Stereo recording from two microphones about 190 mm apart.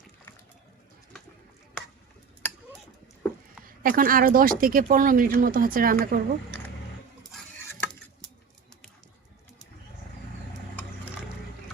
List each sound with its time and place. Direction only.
3.8 s speech: 45° right (ahead or behind)
7.6 s stir: 10° left (ahead or behind)